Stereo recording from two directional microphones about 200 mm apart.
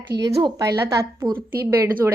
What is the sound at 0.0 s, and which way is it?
A woman's voice, 20° right (ahead or behind).